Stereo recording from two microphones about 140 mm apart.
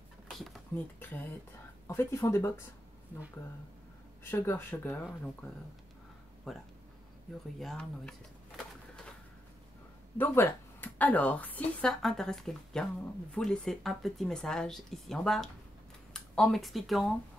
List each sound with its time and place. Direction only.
0.9 s speech: 15° left (ahead or behind)
4.2 s speech: 15° left (ahead or behind)
6.5 s speech: centre (ahead or behind)
10.1 s speech: 15° left (ahead or behind)